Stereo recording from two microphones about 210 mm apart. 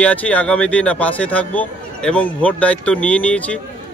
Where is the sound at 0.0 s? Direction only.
5° left (ahead or behind).